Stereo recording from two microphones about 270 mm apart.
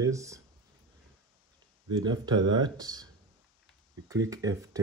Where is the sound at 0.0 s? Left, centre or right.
Centre.